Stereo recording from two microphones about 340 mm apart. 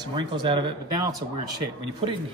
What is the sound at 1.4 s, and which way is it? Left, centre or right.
Speech, right.